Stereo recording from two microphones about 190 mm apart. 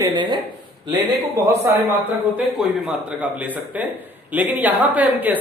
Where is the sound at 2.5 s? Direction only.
5° right (ahead or behind).